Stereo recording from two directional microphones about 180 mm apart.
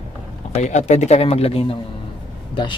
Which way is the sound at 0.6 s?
40° left (ahead or behind).